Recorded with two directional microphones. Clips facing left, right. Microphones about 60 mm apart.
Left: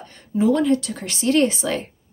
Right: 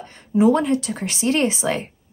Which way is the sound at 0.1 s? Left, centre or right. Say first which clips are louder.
Right 3 dB; right.